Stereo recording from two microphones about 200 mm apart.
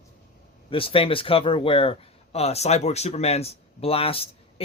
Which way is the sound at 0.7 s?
25° left (ahead or behind).